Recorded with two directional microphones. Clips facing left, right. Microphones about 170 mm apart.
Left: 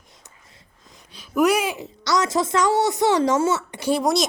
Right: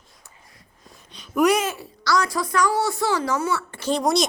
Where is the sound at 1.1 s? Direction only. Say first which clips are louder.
Even; 5° left (ahead or behind).